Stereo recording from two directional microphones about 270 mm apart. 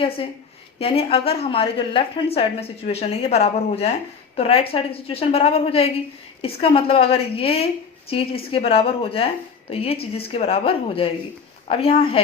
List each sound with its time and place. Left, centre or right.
0.8 s speech: left